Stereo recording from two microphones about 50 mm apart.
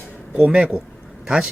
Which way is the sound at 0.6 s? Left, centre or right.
Centre.